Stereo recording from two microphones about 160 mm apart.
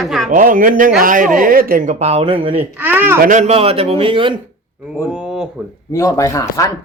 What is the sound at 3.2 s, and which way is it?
A man's voice, 50° right (ahead or behind).